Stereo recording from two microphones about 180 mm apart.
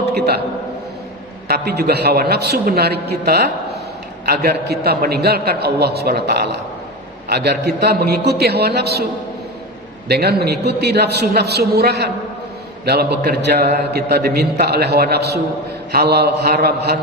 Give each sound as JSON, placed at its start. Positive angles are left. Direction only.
{"t": 1.5, "sound": "a man's voice", "side_deg": -60}
{"t": 10.1, "sound": "a man's voice", "side_deg": -60}